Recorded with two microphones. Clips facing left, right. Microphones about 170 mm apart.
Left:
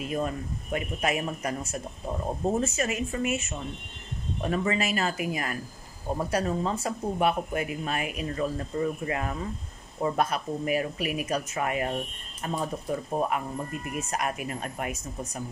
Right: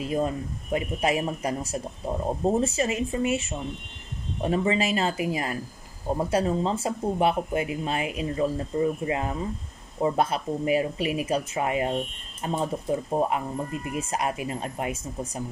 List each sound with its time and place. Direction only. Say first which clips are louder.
0.0 s speech: right 3 dB; 25° right (ahead or behind)